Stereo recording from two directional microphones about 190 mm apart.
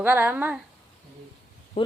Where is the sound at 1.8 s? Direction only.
30° left (ahead or behind).